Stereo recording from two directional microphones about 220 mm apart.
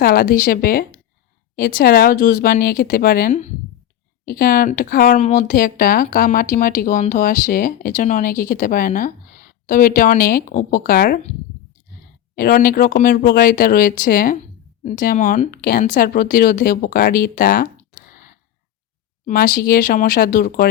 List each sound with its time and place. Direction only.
0.0 s speech: 40° left (ahead or behind)
12.4 s speech: 40° left (ahead or behind)